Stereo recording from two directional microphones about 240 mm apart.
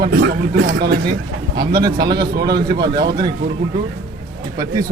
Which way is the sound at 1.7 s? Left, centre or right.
Centre.